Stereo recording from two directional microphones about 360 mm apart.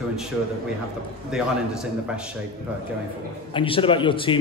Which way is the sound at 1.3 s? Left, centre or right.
Centre.